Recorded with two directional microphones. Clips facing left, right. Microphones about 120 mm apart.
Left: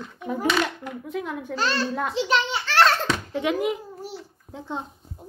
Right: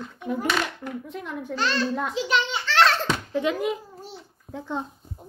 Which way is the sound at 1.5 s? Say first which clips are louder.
Even; 40° left (ahead or behind).